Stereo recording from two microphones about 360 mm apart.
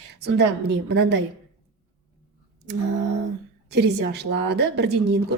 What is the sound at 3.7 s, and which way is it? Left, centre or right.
A woman's voice, right.